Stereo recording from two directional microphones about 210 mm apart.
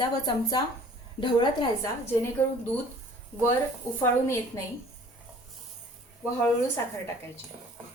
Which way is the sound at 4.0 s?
10° left (ahead or behind).